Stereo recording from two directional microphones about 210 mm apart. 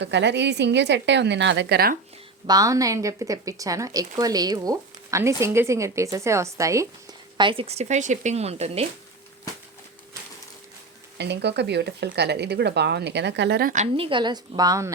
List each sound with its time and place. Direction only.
0.0 s a woman's voice: 55° right (ahead or behind)
2.5 s speech: 15° right (ahead or behind)
11.2 s a woman's voice: 55° right (ahead or behind)
13.9 s a woman's voice: 25° right (ahead or behind)